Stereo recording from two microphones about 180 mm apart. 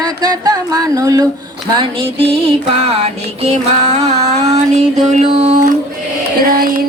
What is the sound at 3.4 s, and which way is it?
Music, 35° right (ahead or behind).